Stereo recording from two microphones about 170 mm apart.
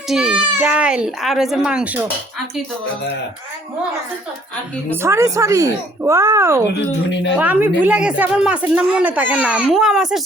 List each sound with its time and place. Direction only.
0.1 s speech: centre (ahead or behind)
4.9 s speech: 15° right (ahead or behind)